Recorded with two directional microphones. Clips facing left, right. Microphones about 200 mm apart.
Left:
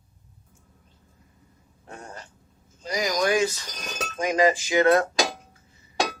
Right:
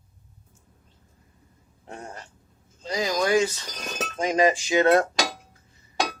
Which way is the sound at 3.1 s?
15° left (ahead or behind).